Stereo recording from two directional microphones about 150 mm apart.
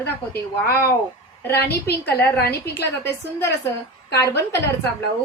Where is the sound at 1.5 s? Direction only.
90° left.